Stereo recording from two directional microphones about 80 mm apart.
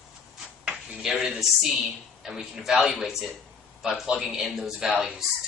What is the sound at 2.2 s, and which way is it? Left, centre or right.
Speech, centre.